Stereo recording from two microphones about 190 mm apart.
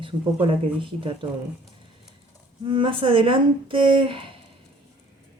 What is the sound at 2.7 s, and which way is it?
Speech, 25° right (ahead or behind).